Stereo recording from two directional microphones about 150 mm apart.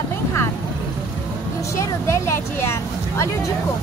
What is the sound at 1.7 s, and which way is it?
Speech, 20° left (ahead or behind).